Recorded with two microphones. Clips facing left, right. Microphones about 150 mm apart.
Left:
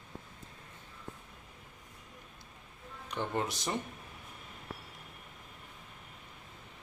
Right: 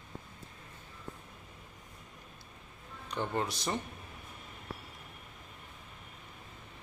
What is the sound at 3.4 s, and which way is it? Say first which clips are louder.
Speech: right 1 dB; 20° left (ahead or behind).